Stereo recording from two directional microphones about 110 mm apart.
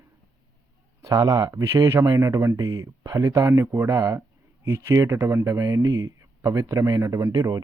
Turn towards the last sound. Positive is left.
turn(degrees=-35)  # may be behind; listen again after turning